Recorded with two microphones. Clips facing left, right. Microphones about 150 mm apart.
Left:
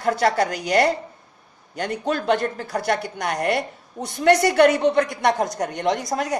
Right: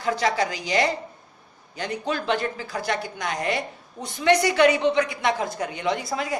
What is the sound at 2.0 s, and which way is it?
A woman's voice, 50° left (ahead or behind).